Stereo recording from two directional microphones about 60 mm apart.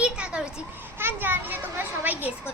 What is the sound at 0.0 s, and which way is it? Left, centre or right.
Children playing, centre.